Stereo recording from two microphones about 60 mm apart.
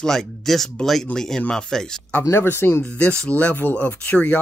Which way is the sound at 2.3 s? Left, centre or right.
Left.